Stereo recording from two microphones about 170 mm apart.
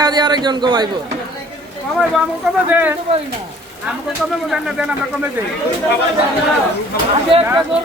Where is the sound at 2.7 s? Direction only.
10° right (ahead or behind).